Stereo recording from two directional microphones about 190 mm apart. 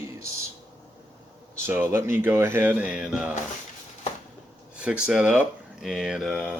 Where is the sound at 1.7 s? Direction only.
10° right (ahead or behind).